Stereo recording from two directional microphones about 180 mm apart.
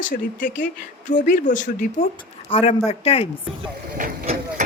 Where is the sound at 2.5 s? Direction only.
35° left (ahead or behind).